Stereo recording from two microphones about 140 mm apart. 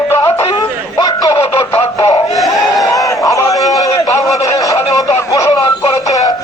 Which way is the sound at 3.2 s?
25° left (ahead or behind).